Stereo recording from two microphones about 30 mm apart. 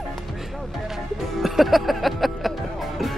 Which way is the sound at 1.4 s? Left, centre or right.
Centre.